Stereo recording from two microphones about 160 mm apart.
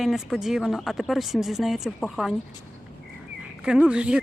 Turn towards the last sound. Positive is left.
turn(degrees=-5)  # may be behind; listen again after turning